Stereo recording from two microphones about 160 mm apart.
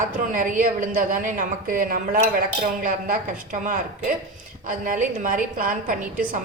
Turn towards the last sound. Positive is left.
turn(degrees=-55)  # may be behind; listen again after turning